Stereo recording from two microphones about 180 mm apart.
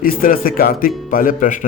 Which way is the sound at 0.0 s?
50° left (ahead or behind).